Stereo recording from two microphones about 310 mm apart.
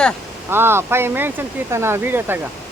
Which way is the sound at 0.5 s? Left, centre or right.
Centre.